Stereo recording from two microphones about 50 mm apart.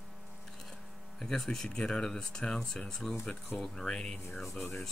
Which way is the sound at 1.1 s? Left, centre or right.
Centre.